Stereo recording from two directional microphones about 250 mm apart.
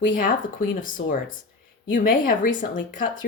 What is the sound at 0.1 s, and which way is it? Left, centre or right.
Speech, left.